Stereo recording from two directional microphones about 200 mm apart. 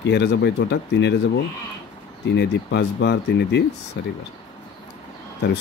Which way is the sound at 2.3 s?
60° left (ahead or behind).